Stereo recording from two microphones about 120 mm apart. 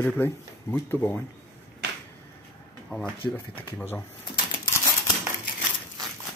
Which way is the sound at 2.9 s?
10° left (ahead or behind).